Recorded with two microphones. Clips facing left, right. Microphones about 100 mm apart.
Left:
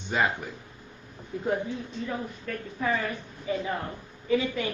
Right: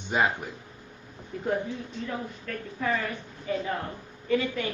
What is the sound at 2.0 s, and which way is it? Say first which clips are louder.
A man's voice: left 1 dB; 10° left (ahead or behind).